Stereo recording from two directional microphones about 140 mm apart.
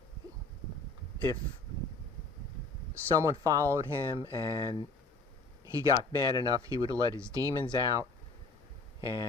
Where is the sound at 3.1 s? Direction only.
20° right (ahead or behind).